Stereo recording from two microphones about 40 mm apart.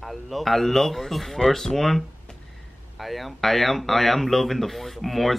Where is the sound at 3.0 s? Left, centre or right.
Centre.